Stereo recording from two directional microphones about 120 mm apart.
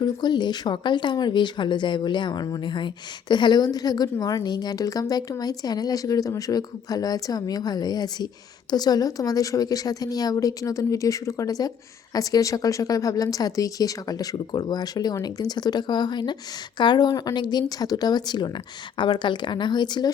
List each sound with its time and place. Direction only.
0.0 s speech: 35° left (ahead or behind)